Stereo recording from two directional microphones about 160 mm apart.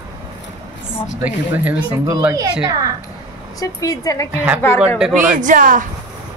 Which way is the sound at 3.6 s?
20° left (ahead or behind).